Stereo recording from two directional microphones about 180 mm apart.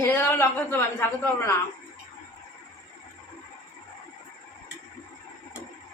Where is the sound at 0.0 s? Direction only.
15° left (ahead or behind).